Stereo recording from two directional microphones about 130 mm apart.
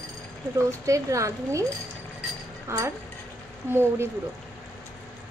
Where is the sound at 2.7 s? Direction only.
20° right (ahead or behind).